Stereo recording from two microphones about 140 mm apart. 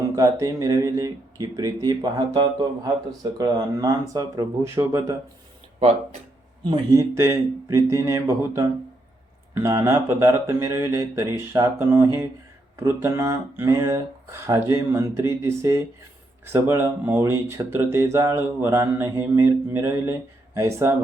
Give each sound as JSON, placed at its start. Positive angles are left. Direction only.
{"t": 0.2, "sound": "speech", "side_deg": -25}
{"t": 6.6, "sound": "speech", "side_deg": -30}